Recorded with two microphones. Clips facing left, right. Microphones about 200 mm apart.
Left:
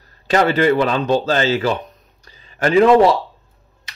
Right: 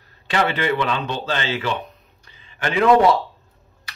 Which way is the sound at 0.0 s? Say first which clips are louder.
Left 5 dB; 40° left (ahead or behind).